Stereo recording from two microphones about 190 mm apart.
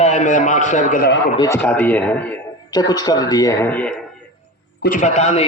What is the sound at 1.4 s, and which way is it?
Speech, 15° left (ahead or behind).